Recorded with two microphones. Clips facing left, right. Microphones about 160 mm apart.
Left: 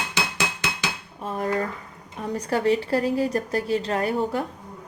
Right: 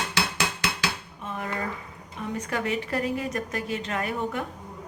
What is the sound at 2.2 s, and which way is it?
A woman's voice, 35° left (ahead or behind).